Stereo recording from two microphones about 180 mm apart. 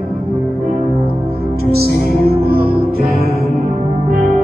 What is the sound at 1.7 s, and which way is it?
Music, 60° right (ahead or behind).